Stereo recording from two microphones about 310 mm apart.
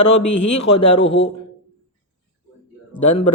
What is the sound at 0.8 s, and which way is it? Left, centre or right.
Speech, centre.